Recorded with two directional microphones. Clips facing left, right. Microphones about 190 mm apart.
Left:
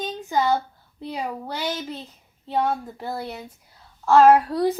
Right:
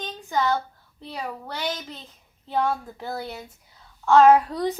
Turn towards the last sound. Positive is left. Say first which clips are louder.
# left 1 dB
turn(degrees=0)  # may be behind; listen again after turning